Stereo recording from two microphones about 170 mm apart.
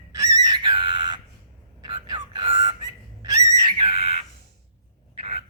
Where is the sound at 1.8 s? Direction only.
25° right (ahead or behind).